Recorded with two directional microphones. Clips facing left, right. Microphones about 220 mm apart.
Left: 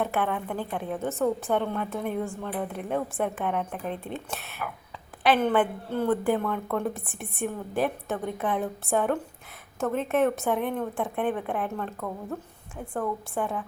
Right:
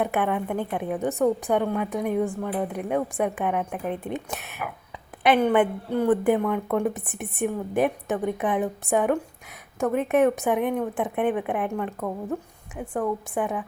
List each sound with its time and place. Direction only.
0.0 s a woman's voice: 15° right (ahead or behind)